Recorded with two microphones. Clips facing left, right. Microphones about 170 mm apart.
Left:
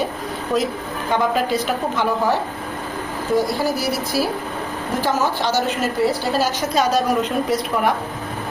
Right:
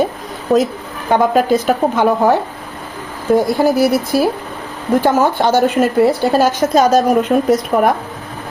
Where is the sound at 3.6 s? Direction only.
55° right (ahead or behind).